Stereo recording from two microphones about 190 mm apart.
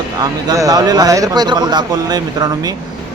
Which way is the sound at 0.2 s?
20° right (ahead or behind).